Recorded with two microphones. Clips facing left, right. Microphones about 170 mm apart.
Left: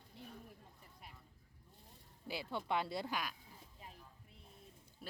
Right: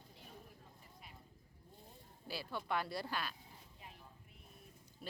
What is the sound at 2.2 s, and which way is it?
Speech, 20° left (ahead or behind).